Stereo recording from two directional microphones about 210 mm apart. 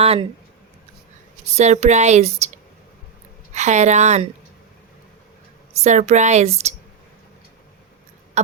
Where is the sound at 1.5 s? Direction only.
30° right (ahead or behind).